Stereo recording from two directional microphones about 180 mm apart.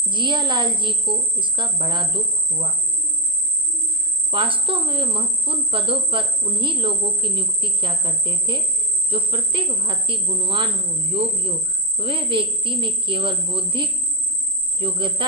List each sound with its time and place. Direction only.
0.1 s speech: 25° right (ahead or behind)
4.3 s speech: 30° right (ahead or behind)